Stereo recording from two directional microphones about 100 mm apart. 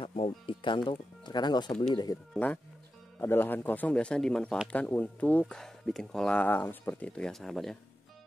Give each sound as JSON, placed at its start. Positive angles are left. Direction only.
{"t": 0.0, "sound": "speech", "side_deg": 60}
{"t": 2.3, "sound": "speech", "side_deg": 15}